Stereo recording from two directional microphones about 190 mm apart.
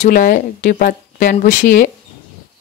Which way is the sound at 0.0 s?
45° left (ahead or behind).